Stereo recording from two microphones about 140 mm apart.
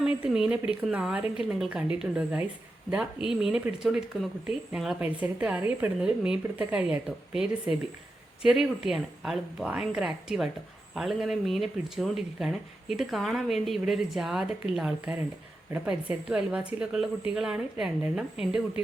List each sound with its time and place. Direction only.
0.0 s speech: 5° right (ahead or behind)